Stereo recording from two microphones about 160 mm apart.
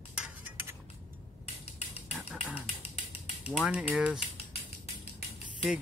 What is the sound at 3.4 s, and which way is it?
Speech, 5° right (ahead or behind).